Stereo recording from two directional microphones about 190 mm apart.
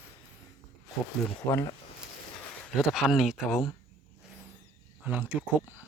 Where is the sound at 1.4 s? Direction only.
15° left (ahead or behind).